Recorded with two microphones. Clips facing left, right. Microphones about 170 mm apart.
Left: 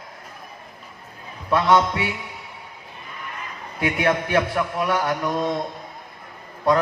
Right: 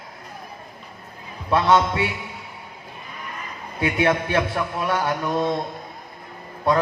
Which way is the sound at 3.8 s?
25° right (ahead or behind).